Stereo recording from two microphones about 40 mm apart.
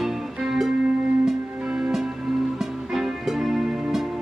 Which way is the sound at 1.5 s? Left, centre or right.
Right.